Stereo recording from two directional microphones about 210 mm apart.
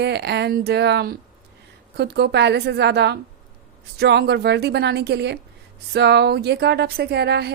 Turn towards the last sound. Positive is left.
turn(degrees=-50)  # may be behind; listen again after turning